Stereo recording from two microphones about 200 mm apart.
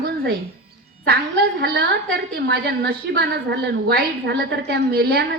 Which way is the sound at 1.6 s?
55° right (ahead or behind).